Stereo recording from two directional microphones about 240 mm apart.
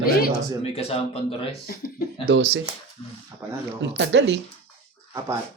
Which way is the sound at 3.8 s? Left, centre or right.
Right.